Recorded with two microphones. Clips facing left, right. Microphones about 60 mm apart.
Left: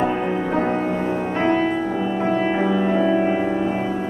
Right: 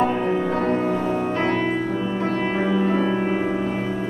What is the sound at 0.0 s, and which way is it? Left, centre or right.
Music, centre.